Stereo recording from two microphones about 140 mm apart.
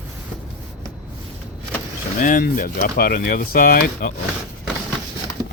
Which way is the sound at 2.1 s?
75° left (ahead or behind).